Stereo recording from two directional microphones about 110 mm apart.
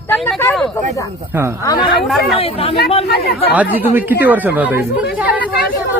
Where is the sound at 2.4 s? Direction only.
60° left (ahead or behind).